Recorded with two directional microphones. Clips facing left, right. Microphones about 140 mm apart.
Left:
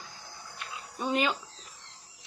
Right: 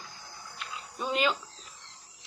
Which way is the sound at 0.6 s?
20° left (ahead or behind).